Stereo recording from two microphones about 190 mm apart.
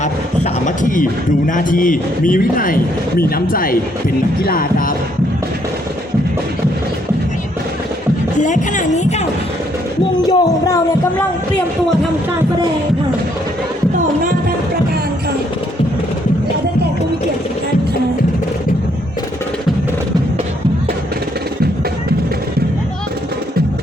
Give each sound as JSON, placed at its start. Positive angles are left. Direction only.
{"t": 0.0, "sound": "a sound", "side_deg": 40}
{"t": 1.5, "sound": "a man's voice", "side_deg": 45}
{"t": 4.4, "sound": "music", "side_deg": 50}
{"t": 8.4, "sound": "speech", "side_deg": 40}
{"t": 10.2, "sound": "speech", "side_deg": 20}